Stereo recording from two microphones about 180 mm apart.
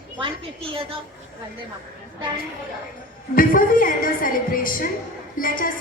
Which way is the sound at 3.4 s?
50° left (ahead or behind).